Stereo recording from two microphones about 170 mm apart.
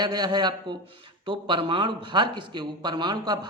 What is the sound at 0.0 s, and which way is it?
A man's voice, 25° right (ahead or behind).